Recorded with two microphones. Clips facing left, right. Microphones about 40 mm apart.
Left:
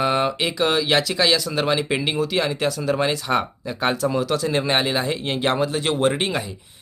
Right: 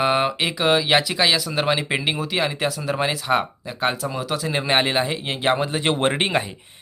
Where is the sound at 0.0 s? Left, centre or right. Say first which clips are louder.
Right 1 dB; centre.